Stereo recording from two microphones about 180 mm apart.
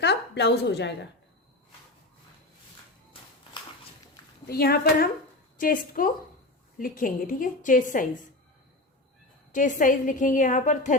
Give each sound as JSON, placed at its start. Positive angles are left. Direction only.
{"t": 0.0, "sound": "a woman's voice", "side_deg": 70}
{"t": 4.4, "sound": "a woman's voice", "side_deg": 60}
{"t": 9.5, "sound": "a woman's voice", "side_deg": 45}